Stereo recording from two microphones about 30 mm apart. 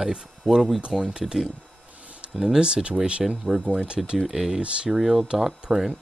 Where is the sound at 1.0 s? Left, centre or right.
Right.